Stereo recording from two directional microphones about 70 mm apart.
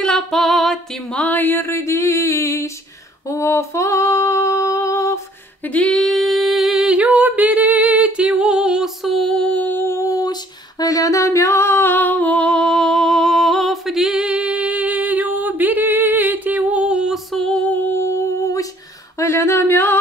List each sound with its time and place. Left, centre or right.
0.0 s female singing: centre
1.1 s a sound: left
3.3 s female singing: left
5.6 s female singing: centre
5.9 s singing: centre
6.9 s a sound: right
8.3 s music: centre
9.5 s humming: left
9.8 s music: left
10.1 s female singing: left; by 17.1 s centre
17.1 s music: centre
17.6 s humming: left
18.0 s humming: left
19.1 s singing: left